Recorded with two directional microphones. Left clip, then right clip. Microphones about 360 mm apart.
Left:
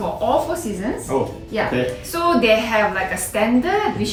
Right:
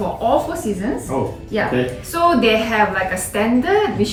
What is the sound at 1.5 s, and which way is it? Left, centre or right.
A woman's voice, centre.